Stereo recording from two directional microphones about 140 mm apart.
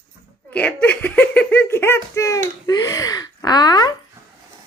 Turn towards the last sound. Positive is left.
turn(degrees=30)  # may be behind; listen again after turning